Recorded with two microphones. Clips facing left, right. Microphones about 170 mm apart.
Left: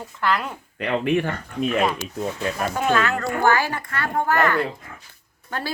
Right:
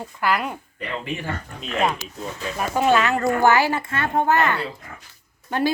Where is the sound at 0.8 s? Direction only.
65° left (ahead or behind).